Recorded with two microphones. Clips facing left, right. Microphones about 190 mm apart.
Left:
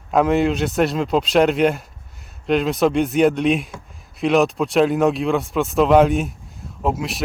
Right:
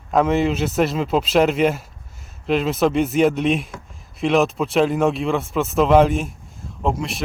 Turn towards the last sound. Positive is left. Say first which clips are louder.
# even
turn(degrees=5)  # may be behind; listen again after turning